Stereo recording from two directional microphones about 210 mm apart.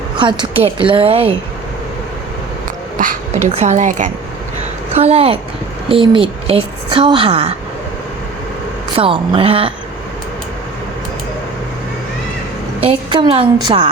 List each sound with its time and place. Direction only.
0.2 s a woman's voice: 25° right (ahead or behind)
3.0 s a woman's voice: 35° right (ahead or behind)
9.0 s a woman's voice: 25° right (ahead or behind)
12.8 s a woman's voice: 25° right (ahead or behind)